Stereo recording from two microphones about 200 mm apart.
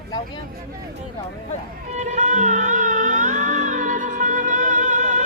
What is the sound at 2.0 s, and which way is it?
Music, 35° right (ahead or behind).